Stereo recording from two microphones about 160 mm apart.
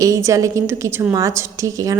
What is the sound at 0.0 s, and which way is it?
A woman's voice, 20° right (ahead or behind).